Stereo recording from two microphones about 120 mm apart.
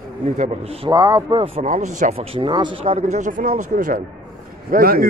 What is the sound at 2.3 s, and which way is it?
Speech, 40° right (ahead or behind).